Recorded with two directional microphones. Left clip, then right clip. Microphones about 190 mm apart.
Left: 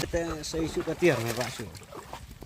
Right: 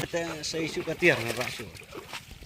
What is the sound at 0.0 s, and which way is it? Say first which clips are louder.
Speech: even; 35° left (ahead or behind).